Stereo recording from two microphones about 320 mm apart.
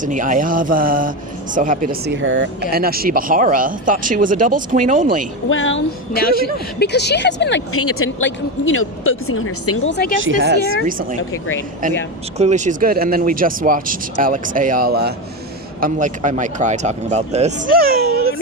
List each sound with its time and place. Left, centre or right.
0.0 s speech: right
5.5 s speech: left
10.2 s speech: right
12.4 s speech: right